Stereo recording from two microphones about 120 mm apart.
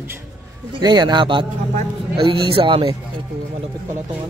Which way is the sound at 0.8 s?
35° right (ahead or behind).